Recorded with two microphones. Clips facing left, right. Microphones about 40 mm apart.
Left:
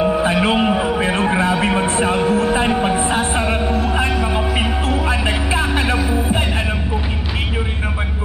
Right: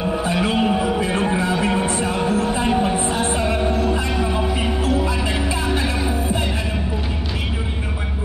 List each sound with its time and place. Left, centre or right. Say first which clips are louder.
0.2 s music: left 4 dB; left
1.6 s a sound: left 3 dB; left
3.1 s music: left 2 dB; left